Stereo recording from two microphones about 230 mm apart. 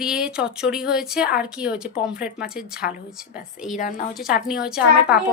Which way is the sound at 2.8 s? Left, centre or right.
Left.